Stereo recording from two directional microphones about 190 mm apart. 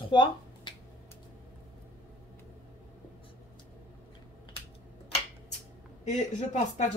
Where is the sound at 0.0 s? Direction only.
25° left (ahead or behind).